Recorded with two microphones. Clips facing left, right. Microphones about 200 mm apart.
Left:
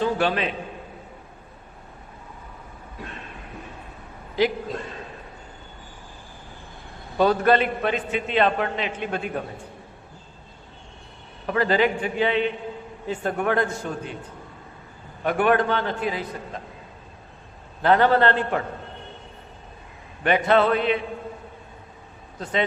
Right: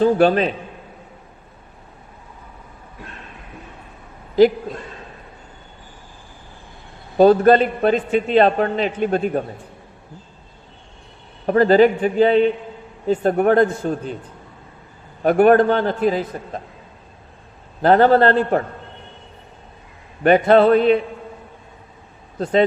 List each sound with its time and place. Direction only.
0.0 s a man's voice: 40° right (ahead or behind)
7.2 s a man's voice: 40° right (ahead or behind)
11.4 s a man's voice: 40° right (ahead or behind)
15.2 s a man's voice: 40° right (ahead or behind)
17.8 s a man's voice: 40° right (ahead or behind)
20.2 s a man's voice: 40° right (ahead or behind)